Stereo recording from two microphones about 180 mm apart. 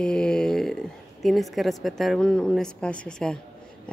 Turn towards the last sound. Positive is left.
turn(degrees=5)  # may be behind; listen again after turning